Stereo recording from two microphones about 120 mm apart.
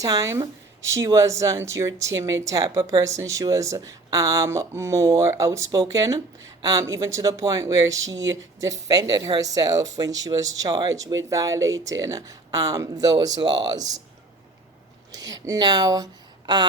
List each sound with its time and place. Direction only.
0.0 s speech: 30° right (ahead or behind)
15.1 s speech: 35° right (ahead or behind)